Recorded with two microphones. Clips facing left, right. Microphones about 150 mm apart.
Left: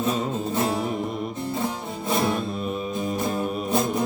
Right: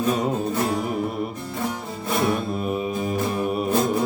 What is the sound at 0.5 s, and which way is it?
Music, 25° left (ahead or behind).